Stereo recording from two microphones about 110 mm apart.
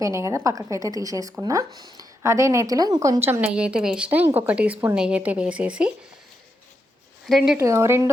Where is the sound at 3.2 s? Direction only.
20° right (ahead or behind).